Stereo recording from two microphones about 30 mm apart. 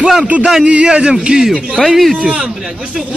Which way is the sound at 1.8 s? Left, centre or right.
Centre.